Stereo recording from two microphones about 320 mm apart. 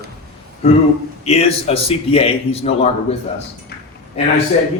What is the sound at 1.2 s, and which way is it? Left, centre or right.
A man's voice, centre.